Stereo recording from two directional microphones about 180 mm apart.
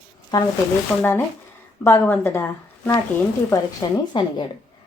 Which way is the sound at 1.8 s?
10° left (ahead or behind).